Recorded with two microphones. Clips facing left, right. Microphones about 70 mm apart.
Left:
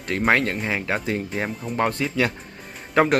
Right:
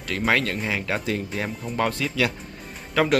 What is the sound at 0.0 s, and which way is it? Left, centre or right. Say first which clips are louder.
Speech: left 3 dB; left.